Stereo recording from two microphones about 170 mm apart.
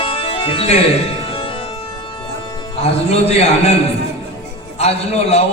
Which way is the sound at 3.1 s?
40° left (ahead or behind).